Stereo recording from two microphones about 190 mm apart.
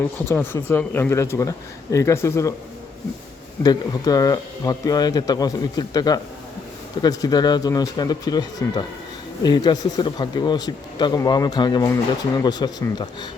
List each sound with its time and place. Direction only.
0.3 s speech: 10° left (ahead or behind)
3.6 s speech: 20° left (ahead or behind)